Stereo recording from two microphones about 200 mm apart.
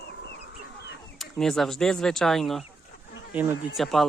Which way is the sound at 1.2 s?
Centre (ahead or behind).